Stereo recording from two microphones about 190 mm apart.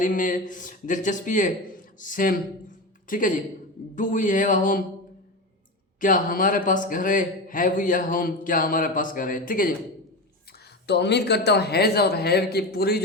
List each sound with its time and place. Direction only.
0.0 s a man's voice: 45° left (ahead or behind)
6.0 s a man's voice: 45° left (ahead or behind)
10.8 s a man's voice: 60° left (ahead or behind)